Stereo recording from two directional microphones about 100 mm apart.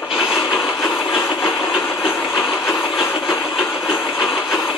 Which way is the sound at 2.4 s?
Centre (ahead or behind).